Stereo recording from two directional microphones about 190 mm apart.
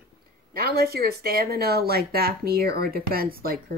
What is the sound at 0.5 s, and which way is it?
A woman's voice, 55° right (ahead or behind).